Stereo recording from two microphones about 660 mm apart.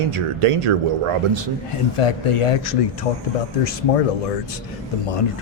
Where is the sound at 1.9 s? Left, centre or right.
Left.